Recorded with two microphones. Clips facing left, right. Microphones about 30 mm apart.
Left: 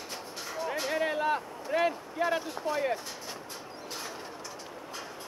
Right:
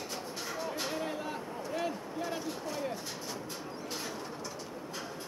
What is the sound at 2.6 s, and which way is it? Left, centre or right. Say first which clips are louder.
Speech: left 7 dB; left.